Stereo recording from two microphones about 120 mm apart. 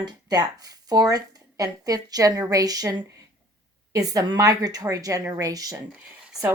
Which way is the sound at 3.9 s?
30° right (ahead or behind).